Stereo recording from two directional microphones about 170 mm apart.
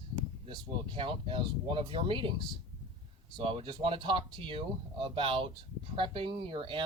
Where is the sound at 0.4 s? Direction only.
30° right (ahead or behind).